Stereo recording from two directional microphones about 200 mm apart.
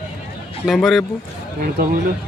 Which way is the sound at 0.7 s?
Centre (ahead or behind).